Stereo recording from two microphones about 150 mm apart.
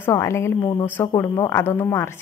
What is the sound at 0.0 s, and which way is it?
A woman's voice, 20° left (ahead or behind).